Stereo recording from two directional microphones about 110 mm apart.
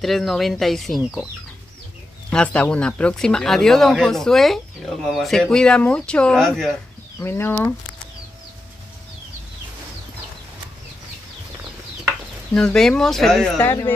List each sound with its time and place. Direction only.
0.0 s speech: centre (ahead or behind)
2.3 s speech: 10° left (ahead or behind)
7.2 s speech: 20° left (ahead or behind)
12.5 s speech: 5° left (ahead or behind)
13.6 s speech: 20° left (ahead or behind)